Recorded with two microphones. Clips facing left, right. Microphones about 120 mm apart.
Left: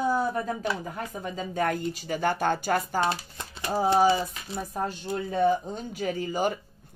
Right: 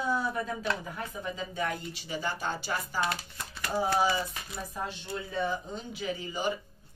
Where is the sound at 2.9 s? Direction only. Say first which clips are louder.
Left 5 dB; 25° left (ahead or behind).